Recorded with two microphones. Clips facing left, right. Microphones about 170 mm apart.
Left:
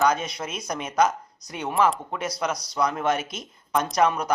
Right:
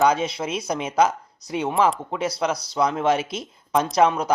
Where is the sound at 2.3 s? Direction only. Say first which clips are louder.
Right 3 dB; 30° right (ahead or behind).